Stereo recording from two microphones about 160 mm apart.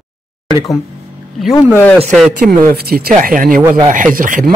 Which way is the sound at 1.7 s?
10° left (ahead or behind).